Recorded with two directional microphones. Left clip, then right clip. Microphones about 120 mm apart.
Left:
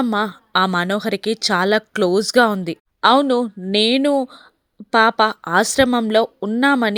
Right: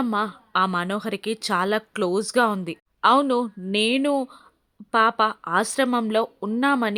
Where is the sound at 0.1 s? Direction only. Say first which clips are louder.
Left 5 dB; 45° left (ahead or behind).